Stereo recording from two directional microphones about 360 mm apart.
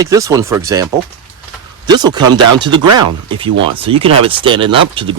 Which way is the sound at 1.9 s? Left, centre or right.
Centre.